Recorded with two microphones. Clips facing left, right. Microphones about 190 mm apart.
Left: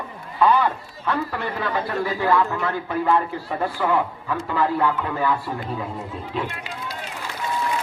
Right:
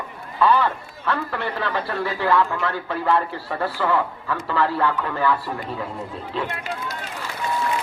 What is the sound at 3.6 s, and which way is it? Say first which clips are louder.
Speech: even; 15° left (ahead or behind).